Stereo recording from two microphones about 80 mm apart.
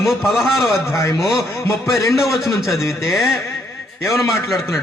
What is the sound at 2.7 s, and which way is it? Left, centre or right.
Speech, left.